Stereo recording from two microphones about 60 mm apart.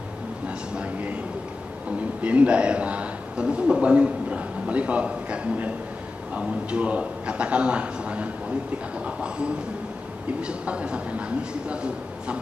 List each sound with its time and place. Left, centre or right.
0.5 s a sound: right
2.2 s a man's voice: right
10.4 s a man's voice: centre